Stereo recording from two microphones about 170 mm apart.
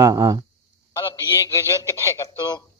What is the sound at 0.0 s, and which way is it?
Speech, 20° right (ahead or behind).